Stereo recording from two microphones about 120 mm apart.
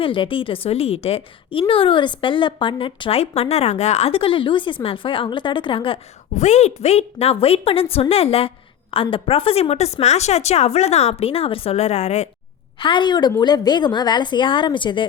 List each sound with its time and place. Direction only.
0.0 s a woman's voice: 45° left (ahead or behind)
6.3 s a woman's voice: 70° left (ahead or behind)
12.8 s speech: 40° left (ahead or behind)